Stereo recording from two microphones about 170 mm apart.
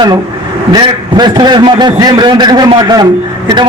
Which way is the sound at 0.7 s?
25° right (ahead or behind).